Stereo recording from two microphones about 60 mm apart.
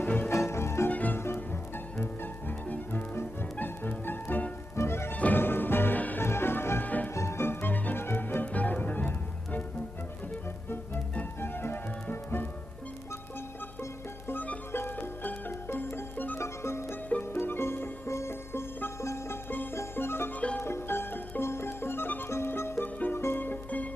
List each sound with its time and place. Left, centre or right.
0.0 s music: left
0.3 s music: left
0.9 s music: left
4.7 s music: left
5.1 s music: left
5.4 s music: left
6.2 s music: left
6.8 s music: left
7.1 s music: left
11.3 s music: left
14.7 s music: left
16.4 s music: left
20.3 s music: left
20.6 s music: left